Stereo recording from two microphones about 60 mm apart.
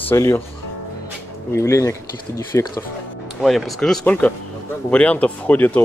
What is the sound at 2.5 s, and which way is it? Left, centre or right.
Speech, left.